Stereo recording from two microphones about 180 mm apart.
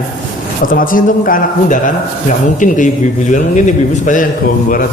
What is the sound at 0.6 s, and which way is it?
Speech, 50° left (ahead or behind).